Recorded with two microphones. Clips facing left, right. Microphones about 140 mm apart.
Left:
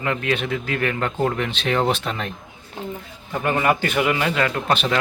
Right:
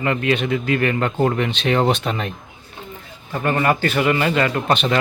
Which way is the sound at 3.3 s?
10° left (ahead or behind).